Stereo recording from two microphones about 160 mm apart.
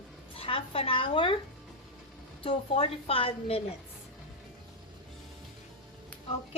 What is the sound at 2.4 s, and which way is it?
A child's voice, 35° left (ahead or behind).